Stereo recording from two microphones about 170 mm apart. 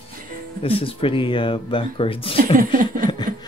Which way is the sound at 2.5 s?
50° right (ahead or behind).